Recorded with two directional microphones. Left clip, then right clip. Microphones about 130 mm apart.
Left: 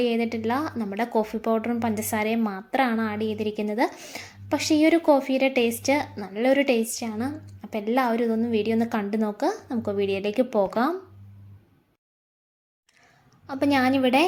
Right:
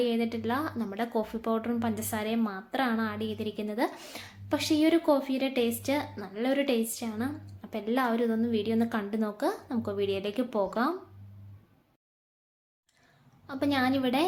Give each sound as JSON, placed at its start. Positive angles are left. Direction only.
{"t": 0.0, "sound": "a woman's voice", "side_deg": 35}
{"t": 3.9, "sound": "speech", "side_deg": 20}
{"t": 4.2, "sound": "a woman's voice", "side_deg": 30}
{"t": 13.5, "sound": "a woman's voice", "side_deg": 35}